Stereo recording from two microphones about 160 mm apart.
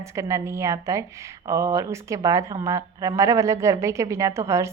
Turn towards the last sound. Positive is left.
turn(degrees=-20)  # may be behind; listen again after turning